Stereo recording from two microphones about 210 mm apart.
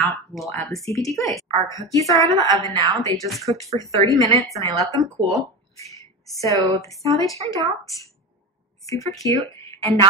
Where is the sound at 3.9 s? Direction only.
15° left (ahead or behind).